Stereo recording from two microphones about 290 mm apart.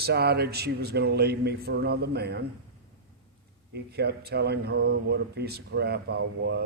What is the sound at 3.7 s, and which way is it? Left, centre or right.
Speech, right.